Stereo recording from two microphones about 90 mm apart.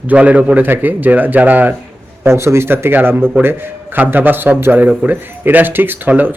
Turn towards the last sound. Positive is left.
turn(degrees=-20)  # may be behind; listen again after turning